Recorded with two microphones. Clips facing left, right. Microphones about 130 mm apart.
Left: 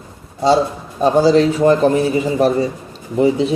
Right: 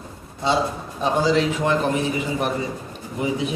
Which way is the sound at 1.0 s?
40° left (ahead or behind).